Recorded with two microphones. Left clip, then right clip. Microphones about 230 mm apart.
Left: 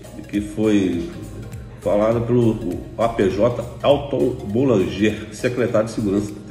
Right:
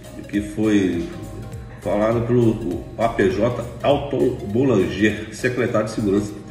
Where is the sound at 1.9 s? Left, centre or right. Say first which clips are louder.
Left 2 dB; centre.